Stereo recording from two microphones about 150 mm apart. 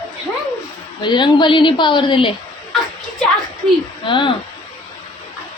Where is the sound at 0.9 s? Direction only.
30° left (ahead or behind).